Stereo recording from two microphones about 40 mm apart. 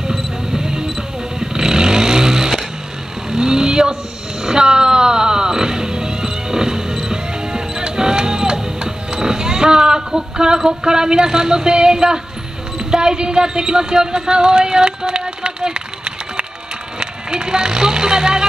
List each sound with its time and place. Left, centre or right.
0.1 s vehicle: centre
4.4 s music: centre
12.7 s speech: centre